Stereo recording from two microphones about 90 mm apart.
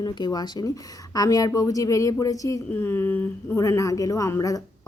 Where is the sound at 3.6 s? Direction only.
35° left (ahead or behind).